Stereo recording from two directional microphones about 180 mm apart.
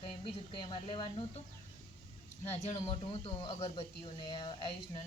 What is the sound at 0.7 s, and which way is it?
Speech, 25° left (ahead or behind).